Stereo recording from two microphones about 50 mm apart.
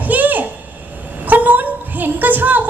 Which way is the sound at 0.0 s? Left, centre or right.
Right.